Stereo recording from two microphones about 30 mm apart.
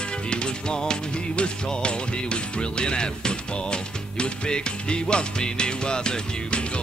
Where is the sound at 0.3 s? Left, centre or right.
Left.